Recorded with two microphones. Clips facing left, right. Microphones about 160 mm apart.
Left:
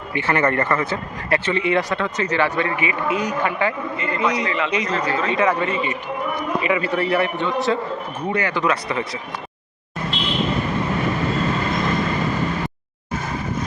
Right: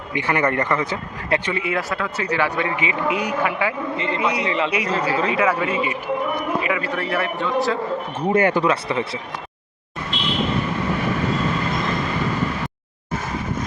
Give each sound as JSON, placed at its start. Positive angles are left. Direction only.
{"t": 0.1, "sound": "speech", "side_deg": -15}
{"t": 3.9, "sound": "speech", "side_deg": -25}
{"t": 4.2, "sound": "speech", "side_deg": -10}
{"t": 4.4, "sound": "speech", "side_deg": -30}
{"t": 4.7, "sound": "a man's voice", "side_deg": -10}
{"t": 8.3, "sound": "speech", "side_deg": -45}
{"t": 8.6, "sound": "speech", "side_deg": -30}